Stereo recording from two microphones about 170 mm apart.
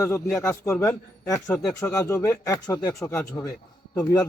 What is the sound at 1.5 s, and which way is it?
Speech, 5° left (ahead or behind).